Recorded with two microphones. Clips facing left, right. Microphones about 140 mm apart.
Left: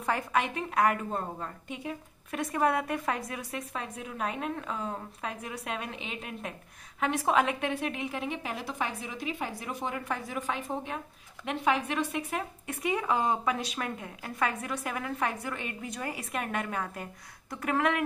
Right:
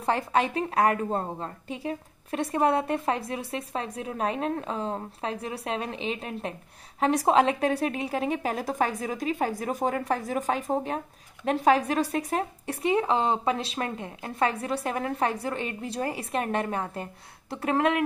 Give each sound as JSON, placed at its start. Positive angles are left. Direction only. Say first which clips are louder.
{"t": 0.0, "sound": "a woman's voice", "louder": "right 4 dB", "side_deg": -30}